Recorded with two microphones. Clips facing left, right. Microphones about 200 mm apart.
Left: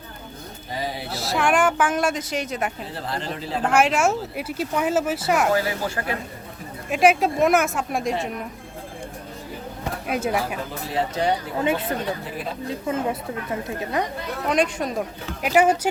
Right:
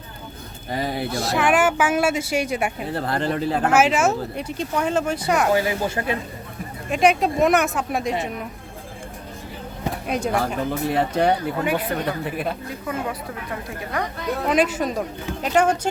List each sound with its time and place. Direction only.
0.7 s speech: 55° right (ahead or behind)
1.1 s speech: centre (ahead or behind)
2.8 s speech: 60° right (ahead or behind)
3.7 s speech: 5° right (ahead or behind)
5.5 s speech: 20° right (ahead or behind)
6.9 s speech: 5° left (ahead or behind)
10.1 s speech: 5° left (ahead or behind)
10.7 s speech: 60° right (ahead or behind)
11.6 s speech: 25° left (ahead or behind)
12.2 s speech: 60° right (ahead or behind)
12.6 s speech: 25° left (ahead or behind)
14.4 s speech: 5° right (ahead or behind)